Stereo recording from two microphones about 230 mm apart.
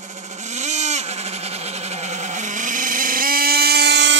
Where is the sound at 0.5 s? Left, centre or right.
Right.